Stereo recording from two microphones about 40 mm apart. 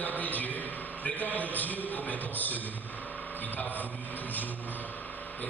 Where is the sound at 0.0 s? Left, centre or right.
Left.